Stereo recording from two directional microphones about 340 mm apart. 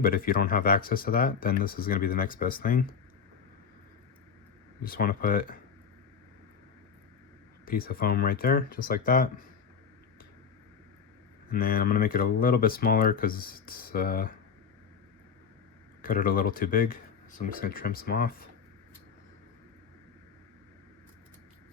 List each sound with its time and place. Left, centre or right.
0.0 s speech: left
4.8 s speech: left
7.6 s speech: left
11.5 s speech: left
16.0 s speech: left